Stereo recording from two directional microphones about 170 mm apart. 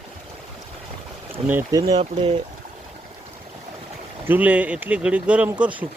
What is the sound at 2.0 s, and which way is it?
Speech, 40° right (ahead or behind).